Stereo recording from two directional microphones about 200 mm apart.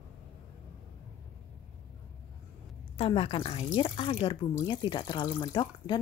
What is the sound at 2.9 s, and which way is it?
Speech, 30° left (ahead or behind).